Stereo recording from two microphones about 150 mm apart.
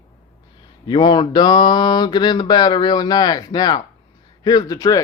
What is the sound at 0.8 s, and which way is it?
Speech, 30° left (ahead or behind).